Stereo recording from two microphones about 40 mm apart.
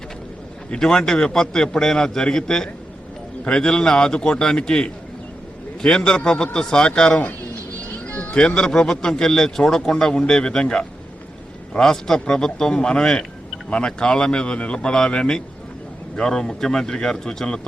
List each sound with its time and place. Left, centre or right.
0.8 s speech: centre
8.0 s speech: left; by 17.7 s centre